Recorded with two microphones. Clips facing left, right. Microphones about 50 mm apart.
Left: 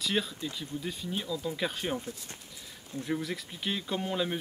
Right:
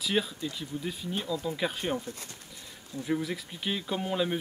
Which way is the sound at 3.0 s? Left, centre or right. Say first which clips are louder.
Right 3 dB; centre.